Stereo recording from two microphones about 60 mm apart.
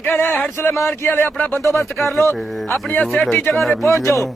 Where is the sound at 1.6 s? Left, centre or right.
Left.